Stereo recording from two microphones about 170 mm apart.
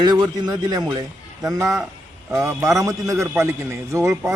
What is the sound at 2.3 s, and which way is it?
Speech, 5° right (ahead or behind).